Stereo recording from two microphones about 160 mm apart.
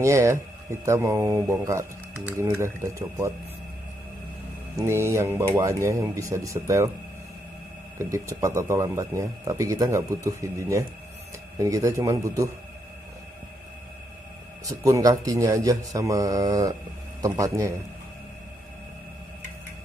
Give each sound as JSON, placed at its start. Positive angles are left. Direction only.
{"t": 0.0, "sound": "speech", "side_deg": -15}
{"t": 4.7, "sound": "speech", "side_deg": -15}
{"t": 8.0, "sound": "speech", "side_deg": -20}
{"t": 14.8, "sound": "speech", "side_deg": -20}